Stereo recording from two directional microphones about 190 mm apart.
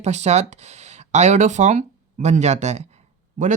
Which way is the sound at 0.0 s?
35° right (ahead or behind).